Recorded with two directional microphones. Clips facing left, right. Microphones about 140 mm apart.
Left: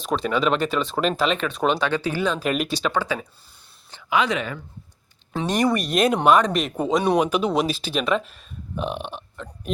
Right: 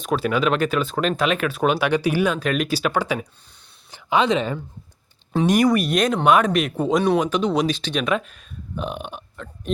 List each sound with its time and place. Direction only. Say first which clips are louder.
0.0 s speech: right 1 dB; 5° right (ahead or behind)
2.4 s speech: right 2 dB; 5° left (ahead or behind)
4.1 s speech: right 3 dB; 25° right (ahead or behind)
5.4 s speech: right 5 dB; 10° right (ahead or behind)
5.6 s speech: right 1 dB; centre (ahead or behind)